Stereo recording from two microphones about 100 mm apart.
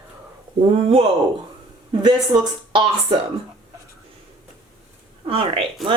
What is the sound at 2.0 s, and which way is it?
Speech, 45° right (ahead or behind).